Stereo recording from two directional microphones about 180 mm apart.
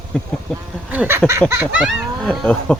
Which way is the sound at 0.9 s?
10° right (ahead or behind).